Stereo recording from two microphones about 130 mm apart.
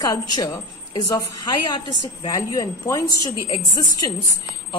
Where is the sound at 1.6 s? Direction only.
35° left (ahead or behind).